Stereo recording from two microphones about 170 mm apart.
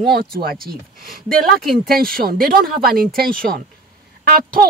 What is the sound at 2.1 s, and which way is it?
Speech, 60° right (ahead or behind).